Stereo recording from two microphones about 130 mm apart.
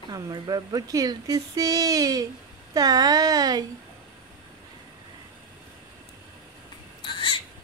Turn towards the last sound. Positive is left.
turn(degrees=40)  # may be behind; listen again after turning